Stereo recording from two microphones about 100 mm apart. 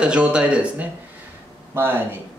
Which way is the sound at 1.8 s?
20° right (ahead or behind).